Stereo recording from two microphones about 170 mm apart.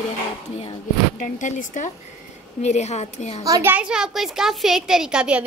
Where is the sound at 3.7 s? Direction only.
5° right (ahead or behind).